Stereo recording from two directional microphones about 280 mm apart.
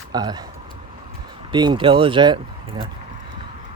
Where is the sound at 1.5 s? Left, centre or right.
Centre.